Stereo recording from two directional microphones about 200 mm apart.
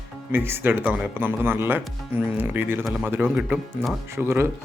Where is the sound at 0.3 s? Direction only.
10° right (ahead or behind).